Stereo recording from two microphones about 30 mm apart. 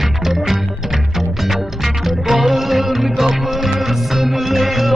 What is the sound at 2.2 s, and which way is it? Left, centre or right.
Music, centre.